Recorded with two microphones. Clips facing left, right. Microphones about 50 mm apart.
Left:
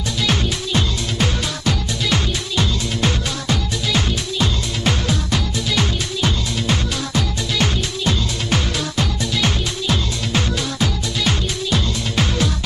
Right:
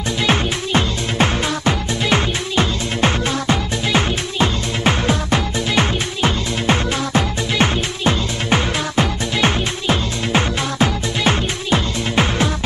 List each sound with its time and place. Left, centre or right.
0.3 s music: right